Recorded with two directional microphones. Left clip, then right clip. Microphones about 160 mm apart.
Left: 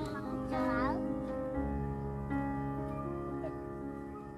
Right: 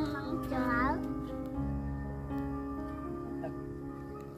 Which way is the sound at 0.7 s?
35° left (ahead or behind).